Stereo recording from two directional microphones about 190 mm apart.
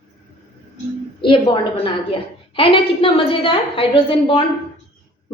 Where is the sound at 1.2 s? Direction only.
25° left (ahead or behind).